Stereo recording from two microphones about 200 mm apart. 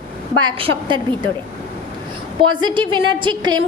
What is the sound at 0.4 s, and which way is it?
Speech, 25° right (ahead or behind).